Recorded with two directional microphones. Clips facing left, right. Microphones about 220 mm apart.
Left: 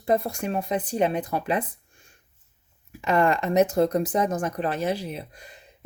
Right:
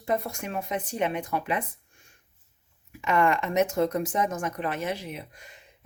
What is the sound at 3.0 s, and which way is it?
Speech, 35° left (ahead or behind).